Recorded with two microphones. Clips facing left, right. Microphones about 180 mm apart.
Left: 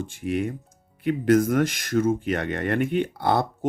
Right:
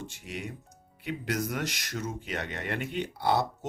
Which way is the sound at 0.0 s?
50° left (ahead or behind).